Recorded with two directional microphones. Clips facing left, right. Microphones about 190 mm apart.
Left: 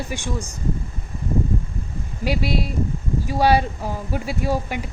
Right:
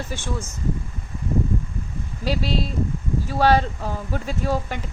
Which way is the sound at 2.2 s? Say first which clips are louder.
Left 1 dB; 10° left (ahead or behind).